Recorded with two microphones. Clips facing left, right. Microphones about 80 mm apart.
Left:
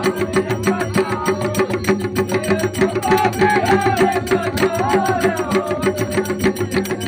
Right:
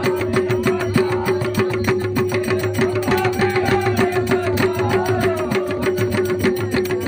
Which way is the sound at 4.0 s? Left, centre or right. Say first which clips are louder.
Left 1 dB; centre.